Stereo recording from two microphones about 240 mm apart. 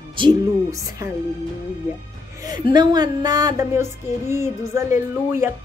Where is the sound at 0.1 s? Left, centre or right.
Centre.